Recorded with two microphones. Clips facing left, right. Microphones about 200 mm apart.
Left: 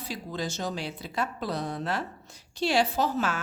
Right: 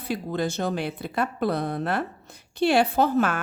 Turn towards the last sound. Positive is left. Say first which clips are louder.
# right 6 dB
turn(degrees=-55)  # may be behind; listen again after turning